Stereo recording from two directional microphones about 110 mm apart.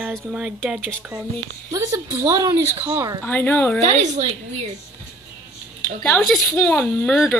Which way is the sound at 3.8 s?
90° right.